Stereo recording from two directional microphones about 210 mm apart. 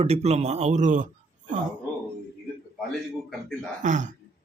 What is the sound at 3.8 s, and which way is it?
Speech, 35° right (ahead or behind).